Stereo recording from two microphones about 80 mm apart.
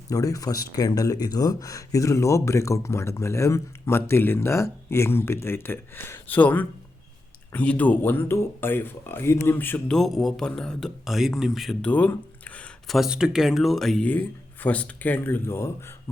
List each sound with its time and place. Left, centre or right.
0.1 s speech: left
9.6 s speech: left
9.9 s a man's voice: centre
11.8 s a sound: centre
12.9 s a man's voice: centre
14.0 s speech: left